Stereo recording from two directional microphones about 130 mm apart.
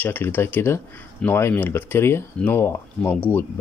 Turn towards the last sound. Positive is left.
turn(degrees=15)  # may be behind; listen again after turning